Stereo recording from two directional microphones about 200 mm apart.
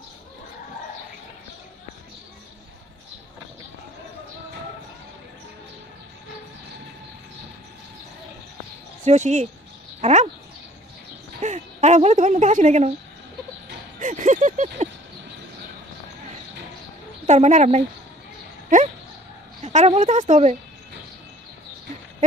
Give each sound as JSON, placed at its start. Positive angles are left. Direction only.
{"t": 9.0, "sound": "a woman's voice", "side_deg": -35}
{"t": 9.9, "sound": "a sound", "side_deg": -35}
{"t": 11.4, "sound": "a woman's voice", "side_deg": -35}
{"t": 13.9, "sound": "a sound", "side_deg": -40}
{"t": 17.3, "sound": "a woman's voice", "side_deg": -35}
{"t": 18.7, "sound": "dog", "side_deg": -40}
{"t": 19.6, "sound": "a woman's voice", "side_deg": -35}